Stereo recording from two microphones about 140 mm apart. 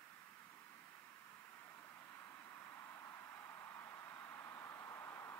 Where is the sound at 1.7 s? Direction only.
20° left (ahead or behind).